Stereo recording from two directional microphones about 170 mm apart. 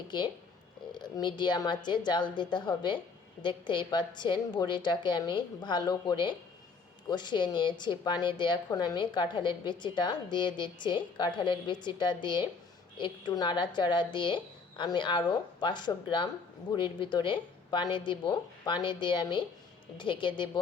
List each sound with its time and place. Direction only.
0.1 s a woman's voice: 25° left (ahead or behind)